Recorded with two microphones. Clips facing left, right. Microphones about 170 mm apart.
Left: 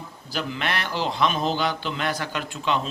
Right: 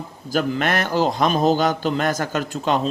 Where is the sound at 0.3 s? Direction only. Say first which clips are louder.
Right 7 dB; 45° right (ahead or behind).